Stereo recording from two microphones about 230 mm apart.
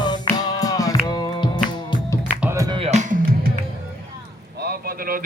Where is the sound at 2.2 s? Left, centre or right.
Centre; by 3.5 s right.